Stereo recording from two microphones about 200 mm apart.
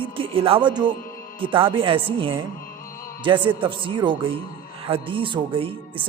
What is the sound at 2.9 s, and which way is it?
Music, 45° left (ahead or behind).